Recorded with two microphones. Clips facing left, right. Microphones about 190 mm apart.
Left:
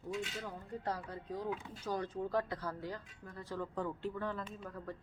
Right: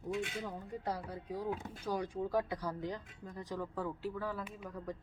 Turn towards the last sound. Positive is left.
turn(degrees=-10)  # may be behind; listen again after turning